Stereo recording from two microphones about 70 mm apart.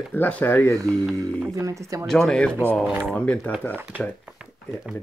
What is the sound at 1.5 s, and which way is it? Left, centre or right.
Speech, right.